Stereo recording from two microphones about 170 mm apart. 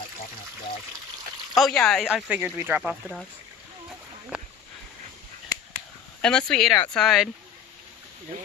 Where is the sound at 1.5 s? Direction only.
Centre (ahead or behind).